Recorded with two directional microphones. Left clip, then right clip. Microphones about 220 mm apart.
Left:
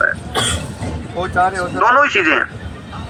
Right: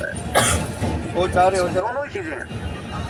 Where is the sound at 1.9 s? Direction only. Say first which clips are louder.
Left 14 dB; 5° left (ahead or behind).